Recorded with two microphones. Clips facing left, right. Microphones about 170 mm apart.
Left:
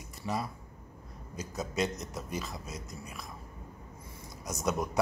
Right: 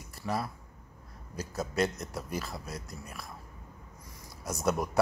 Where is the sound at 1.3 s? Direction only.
20° left (ahead or behind).